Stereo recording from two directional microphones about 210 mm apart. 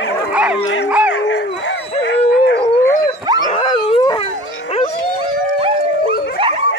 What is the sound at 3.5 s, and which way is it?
Dog, 25° left (ahead or behind).